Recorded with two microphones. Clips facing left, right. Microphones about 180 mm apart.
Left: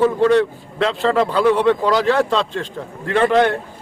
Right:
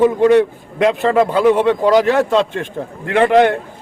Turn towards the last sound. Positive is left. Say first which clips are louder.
# right 3 dB
turn(degrees=-15)  # may be behind; listen again after turning